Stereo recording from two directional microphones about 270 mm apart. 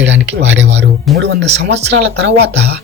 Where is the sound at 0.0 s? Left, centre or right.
Right.